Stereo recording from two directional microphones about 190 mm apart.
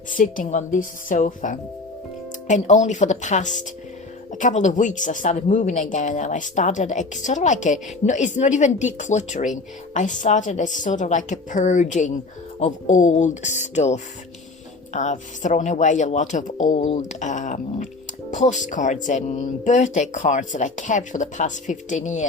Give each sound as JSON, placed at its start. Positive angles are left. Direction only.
{"t": 0.1, "sound": "a woman's voice", "side_deg": 45}